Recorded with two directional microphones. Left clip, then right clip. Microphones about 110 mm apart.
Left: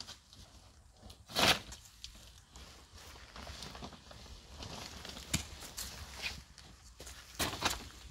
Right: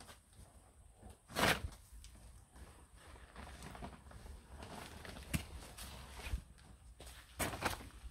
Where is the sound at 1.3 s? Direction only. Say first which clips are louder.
Left 5 dB; 35° left (ahead or behind).